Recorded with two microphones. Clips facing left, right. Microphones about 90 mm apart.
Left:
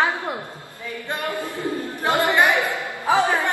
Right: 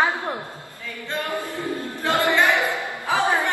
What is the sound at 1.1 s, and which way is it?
Speech, 20° left (ahead or behind).